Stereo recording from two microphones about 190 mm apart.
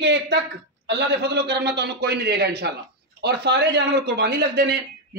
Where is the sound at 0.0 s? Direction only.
65° right (ahead or behind).